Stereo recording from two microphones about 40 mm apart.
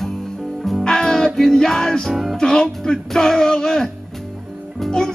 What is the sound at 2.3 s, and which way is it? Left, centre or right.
Speech, centre.